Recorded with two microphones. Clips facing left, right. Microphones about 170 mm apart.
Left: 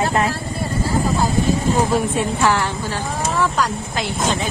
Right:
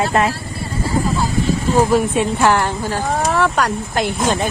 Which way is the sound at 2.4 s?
55° right (ahead or behind).